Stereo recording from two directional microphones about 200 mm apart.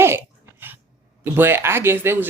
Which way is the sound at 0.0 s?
10° right (ahead or behind).